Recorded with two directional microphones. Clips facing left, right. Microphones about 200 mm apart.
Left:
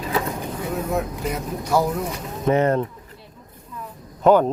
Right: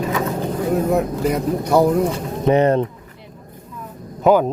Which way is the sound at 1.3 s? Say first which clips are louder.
Right 5 dB; 60° right (ahead or behind).